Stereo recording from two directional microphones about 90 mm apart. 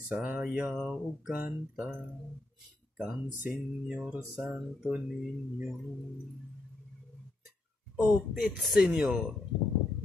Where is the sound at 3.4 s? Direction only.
15° right (ahead or behind).